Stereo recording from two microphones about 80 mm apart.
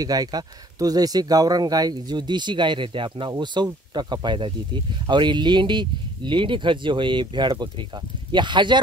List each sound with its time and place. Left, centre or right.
0.0 s speech: right